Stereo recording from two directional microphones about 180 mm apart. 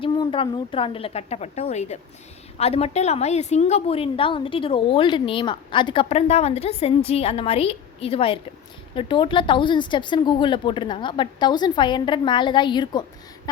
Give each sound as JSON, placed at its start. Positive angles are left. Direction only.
{"t": 0.0, "sound": "a woman's voice", "side_deg": 25}